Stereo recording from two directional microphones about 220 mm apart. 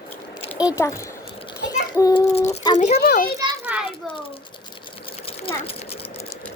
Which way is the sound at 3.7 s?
5° right (ahead or behind).